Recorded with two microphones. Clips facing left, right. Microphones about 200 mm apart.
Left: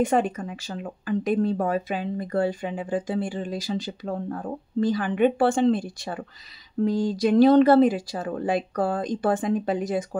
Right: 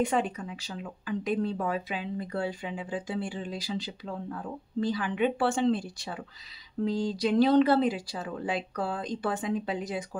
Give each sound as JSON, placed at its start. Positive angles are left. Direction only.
{"t": 0.0, "sound": "speech", "side_deg": 50}